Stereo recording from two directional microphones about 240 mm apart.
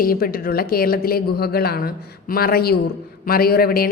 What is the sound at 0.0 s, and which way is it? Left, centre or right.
A woman's voice, left.